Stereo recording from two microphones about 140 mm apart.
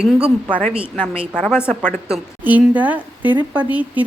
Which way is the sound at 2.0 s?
10° right (ahead or behind).